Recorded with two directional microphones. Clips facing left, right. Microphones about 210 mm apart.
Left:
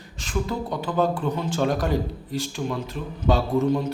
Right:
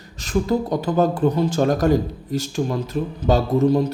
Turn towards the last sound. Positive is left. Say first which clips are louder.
# right 4 dB
turn(degrees=-40)  # may be behind; listen again after turning